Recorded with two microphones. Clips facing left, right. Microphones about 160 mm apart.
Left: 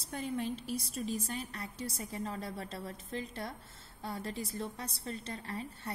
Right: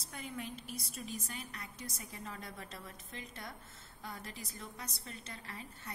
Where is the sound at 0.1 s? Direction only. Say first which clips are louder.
Left 8 dB; 35° left (ahead or behind).